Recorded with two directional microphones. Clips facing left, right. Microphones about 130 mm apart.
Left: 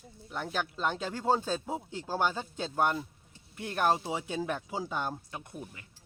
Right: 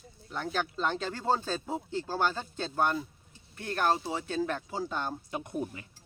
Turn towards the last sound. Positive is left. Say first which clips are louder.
# right 9 dB
turn(degrees=-30)  # may be behind; listen again after turning